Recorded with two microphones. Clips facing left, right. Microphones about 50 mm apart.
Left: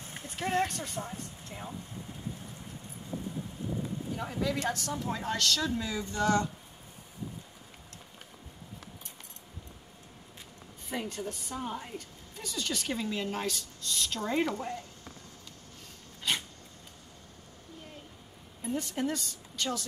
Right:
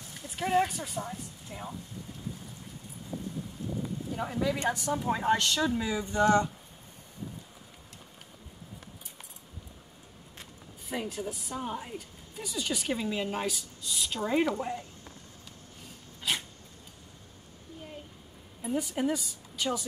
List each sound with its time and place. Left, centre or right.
0.0 s a sound: left
0.4 s a woman's voice: centre
4.2 s a woman's voice: centre
10.9 s a woman's voice: centre
16.2 s a sound: centre
18.6 s speech: centre